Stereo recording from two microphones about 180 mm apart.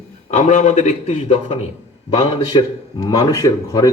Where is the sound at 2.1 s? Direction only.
25° left (ahead or behind).